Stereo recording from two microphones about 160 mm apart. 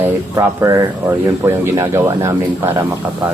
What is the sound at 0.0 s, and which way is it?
Speech, 20° right (ahead or behind).